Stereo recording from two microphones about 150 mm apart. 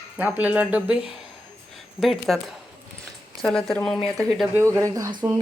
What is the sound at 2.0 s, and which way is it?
Speech, centre (ahead or behind).